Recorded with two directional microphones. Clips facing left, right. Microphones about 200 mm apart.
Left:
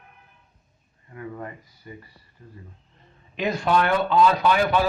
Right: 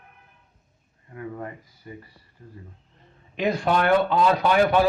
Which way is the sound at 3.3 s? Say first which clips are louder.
Even; 50° right (ahead or behind).